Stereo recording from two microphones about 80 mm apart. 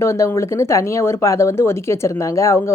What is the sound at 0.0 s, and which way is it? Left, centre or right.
Speech, left.